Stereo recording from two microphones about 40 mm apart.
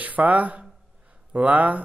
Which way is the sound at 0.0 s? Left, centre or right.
Right.